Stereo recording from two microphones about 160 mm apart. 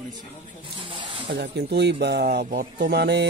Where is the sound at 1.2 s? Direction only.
90° right.